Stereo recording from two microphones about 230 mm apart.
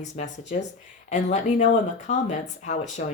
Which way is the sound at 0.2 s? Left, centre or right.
Left.